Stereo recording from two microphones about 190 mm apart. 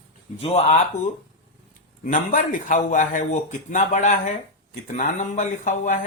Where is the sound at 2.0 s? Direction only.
45° left (ahead or behind).